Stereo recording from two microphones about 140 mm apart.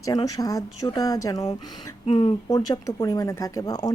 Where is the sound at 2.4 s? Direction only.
25° left (ahead or behind).